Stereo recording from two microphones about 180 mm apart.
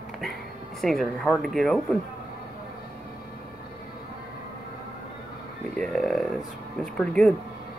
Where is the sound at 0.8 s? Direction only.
Centre (ahead or behind).